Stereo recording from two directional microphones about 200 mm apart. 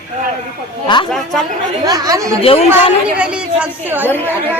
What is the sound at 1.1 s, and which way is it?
Speech, centre (ahead or behind).